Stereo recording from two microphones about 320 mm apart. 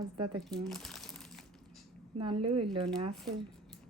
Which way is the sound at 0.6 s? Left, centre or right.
Centre.